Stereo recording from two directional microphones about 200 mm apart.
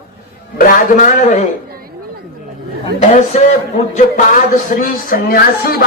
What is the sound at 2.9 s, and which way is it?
A man's voice, 35° left (ahead or behind).